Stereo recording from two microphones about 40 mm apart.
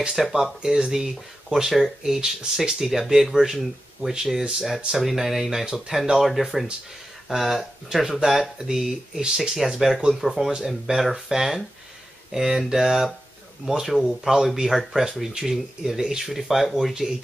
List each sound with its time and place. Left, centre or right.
0.1 s speech: centre
9.6 s speech: centre